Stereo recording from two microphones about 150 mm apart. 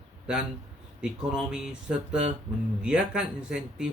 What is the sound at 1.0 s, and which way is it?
Speech, 5° right (ahead or behind).